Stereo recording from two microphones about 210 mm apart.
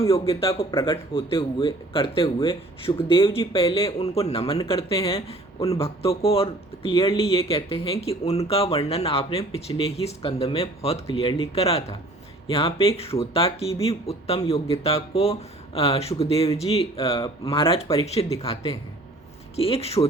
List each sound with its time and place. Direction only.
0.1 s speech: 25° left (ahead or behind)